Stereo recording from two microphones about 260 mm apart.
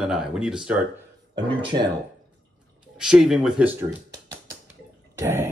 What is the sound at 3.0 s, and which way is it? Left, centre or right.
Speech, centre.